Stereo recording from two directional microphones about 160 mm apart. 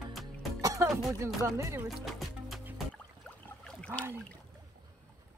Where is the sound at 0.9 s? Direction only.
5° right (ahead or behind).